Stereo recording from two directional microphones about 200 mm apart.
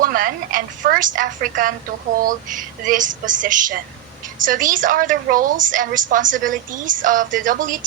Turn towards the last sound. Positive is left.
turn(degrees=-40)  # may be behind; listen again after turning